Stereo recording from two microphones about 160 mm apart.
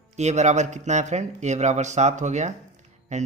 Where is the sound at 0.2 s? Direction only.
45° right (ahead or behind).